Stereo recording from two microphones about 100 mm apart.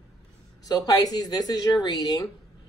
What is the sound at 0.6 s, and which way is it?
A woman's voice, 40° left (ahead or behind).